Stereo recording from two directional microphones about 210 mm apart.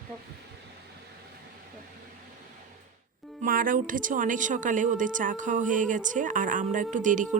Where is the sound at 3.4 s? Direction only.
40° right (ahead or behind).